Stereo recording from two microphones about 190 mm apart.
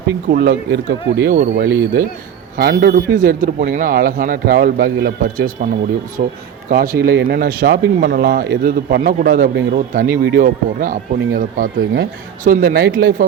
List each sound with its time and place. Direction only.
0.3 s speech: 50° right (ahead or behind)